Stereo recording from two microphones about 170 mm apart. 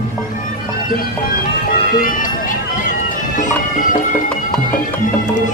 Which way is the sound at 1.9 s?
55° left (ahead or behind).